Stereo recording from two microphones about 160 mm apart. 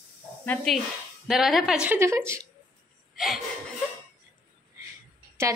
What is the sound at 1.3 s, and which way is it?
A woman's voice, centre (ahead or behind).